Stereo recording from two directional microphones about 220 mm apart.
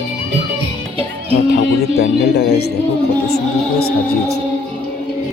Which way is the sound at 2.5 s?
45° left (ahead or behind).